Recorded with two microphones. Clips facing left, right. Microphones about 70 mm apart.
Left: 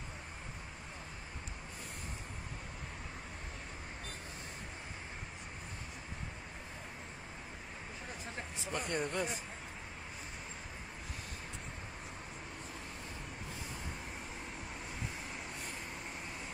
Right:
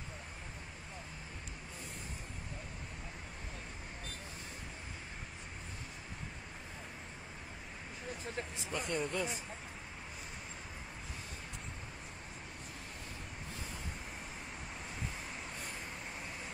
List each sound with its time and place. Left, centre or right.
8.7 s speech: left